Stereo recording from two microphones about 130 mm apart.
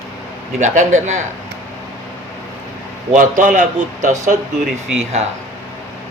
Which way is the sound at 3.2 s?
80° right.